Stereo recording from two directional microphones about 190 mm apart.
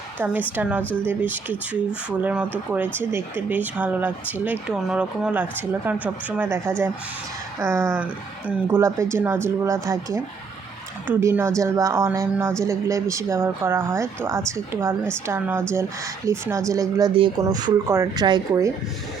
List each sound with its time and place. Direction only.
0.5 s speech: 5° right (ahead or behind)